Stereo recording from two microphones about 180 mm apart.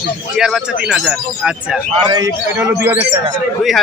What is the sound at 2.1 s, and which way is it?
Speech, 20° right (ahead or behind).